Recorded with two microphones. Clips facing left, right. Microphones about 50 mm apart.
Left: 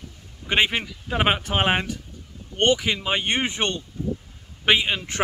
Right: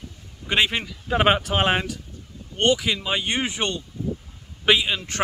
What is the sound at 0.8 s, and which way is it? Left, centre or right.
Speech, centre.